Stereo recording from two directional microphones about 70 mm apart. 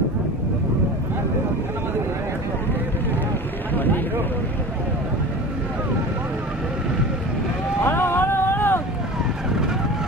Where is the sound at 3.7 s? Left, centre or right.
Left.